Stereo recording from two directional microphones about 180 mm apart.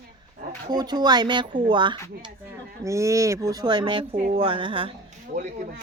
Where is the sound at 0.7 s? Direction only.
25° right (ahead or behind).